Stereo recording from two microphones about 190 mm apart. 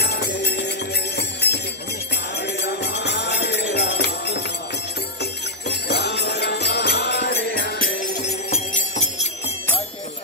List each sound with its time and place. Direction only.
0.0 s music: 60° left (ahead or behind)
8.5 s jingle bell: 35° left (ahead or behind)